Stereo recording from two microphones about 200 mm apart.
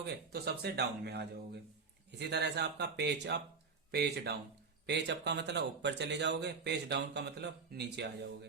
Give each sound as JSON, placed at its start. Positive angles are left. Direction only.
{"t": 0.0, "sound": "speech", "side_deg": -55}